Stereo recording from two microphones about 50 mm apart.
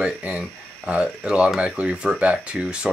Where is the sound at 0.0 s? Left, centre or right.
Right.